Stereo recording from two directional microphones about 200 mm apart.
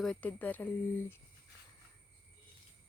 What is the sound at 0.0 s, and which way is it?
Speech, 5° left (ahead or behind).